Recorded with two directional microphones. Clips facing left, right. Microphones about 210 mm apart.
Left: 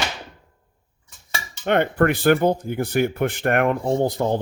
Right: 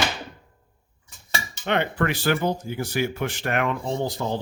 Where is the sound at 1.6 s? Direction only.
50° left (ahead or behind).